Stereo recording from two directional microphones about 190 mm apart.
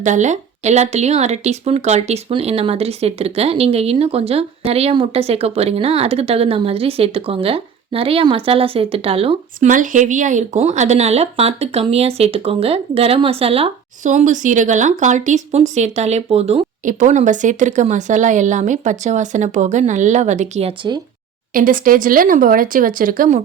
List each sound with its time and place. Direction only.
0.0 s speech: 40° right (ahead or behind)
9.6 s speech: 45° right (ahead or behind); by 21.0 s 25° right (ahead or behind)
21.5 s speech: 45° right (ahead or behind)